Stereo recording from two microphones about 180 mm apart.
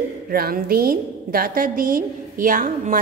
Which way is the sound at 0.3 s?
55° right (ahead or behind).